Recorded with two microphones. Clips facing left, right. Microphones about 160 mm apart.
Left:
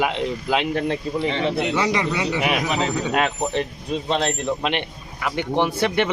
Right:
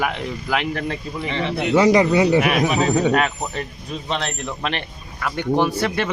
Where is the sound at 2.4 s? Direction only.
20° left (ahead or behind).